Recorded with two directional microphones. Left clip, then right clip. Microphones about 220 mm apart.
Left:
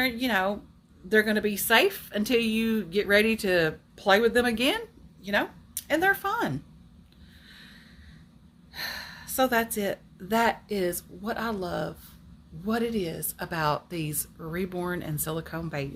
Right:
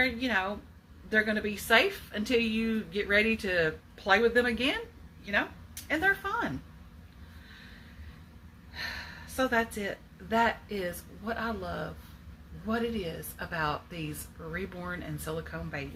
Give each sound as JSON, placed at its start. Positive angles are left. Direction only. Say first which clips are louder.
{"t": 0.0, "sound": "a woman's voice", "louder": "left 3 dB", "side_deg": 55}
{"t": 8.7, "sound": "a woman's voice", "louder": "left 3 dB", "side_deg": 55}